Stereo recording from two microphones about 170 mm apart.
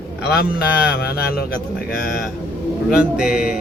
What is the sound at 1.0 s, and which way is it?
Speech, 65° left (ahead or behind).